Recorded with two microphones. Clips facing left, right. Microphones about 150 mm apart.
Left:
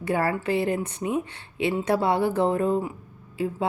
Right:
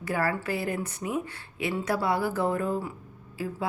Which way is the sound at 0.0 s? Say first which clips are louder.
Left 4 dB; 25° left (ahead or behind).